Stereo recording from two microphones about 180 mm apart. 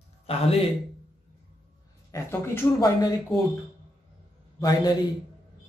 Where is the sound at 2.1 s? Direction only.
15° left (ahead or behind).